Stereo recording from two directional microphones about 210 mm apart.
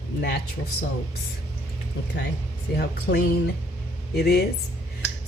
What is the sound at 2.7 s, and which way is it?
Speech, 50° left (ahead or behind).